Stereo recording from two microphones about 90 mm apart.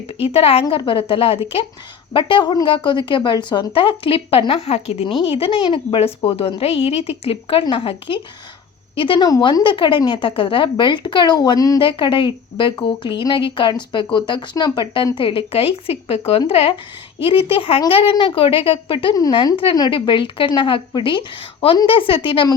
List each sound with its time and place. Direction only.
0.1 s a woman's voice: 90° left
0.9 s a woman's voice: 70° left (ahead or behind); by 1.6 s 90° left
2.1 s a woman's voice: 65° left (ahead or behind); by 7.6 s 90° left
7.6 s a woman's voice: 70° left (ahead or behind)
9.4 s speech: 60° left (ahead or behind)
11.8 s a woman's voice: 70° left (ahead or behind)